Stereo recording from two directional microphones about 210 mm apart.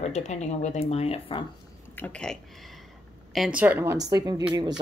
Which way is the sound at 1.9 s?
5° left (ahead or behind).